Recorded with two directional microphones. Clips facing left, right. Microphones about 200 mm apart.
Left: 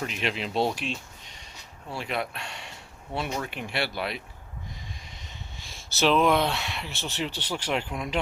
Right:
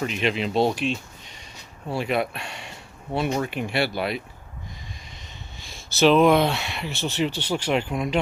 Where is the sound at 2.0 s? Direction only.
10° right (ahead or behind).